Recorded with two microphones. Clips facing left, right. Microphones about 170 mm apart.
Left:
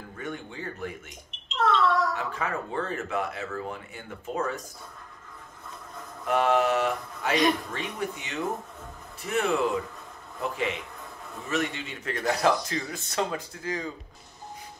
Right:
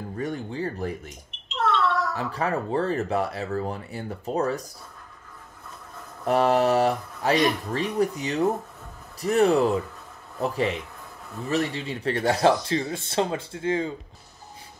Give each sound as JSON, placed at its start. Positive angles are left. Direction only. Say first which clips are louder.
{"t": 0.2, "sound": "speech", "louder": "right 7 dB", "side_deg": -35}
{"t": 1.0, "sound": "a sound", "louder": "right 4 dB", "side_deg": 0}
{"t": 2.1, "sound": "speech", "louder": "right 4 dB", "side_deg": -35}
{"t": 6.2, "sound": "speech", "louder": "right 3 dB", "side_deg": -35}